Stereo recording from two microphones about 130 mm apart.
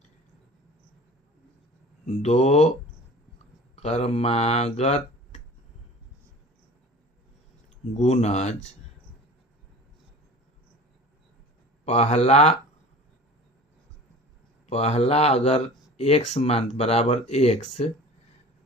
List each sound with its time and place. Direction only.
2.2 s speech: 60° left (ahead or behind)
3.8 s speech: 55° left (ahead or behind)
7.9 s speech: 60° left (ahead or behind)
11.9 s speech: 60° left (ahead or behind)
14.7 s speech: 55° left (ahead or behind)